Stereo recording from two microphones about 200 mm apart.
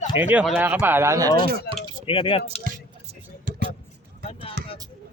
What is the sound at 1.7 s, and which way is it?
Speech, 55° left (ahead or behind).